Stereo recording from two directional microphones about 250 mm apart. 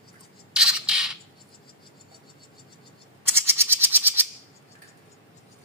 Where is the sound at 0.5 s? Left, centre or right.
Centre.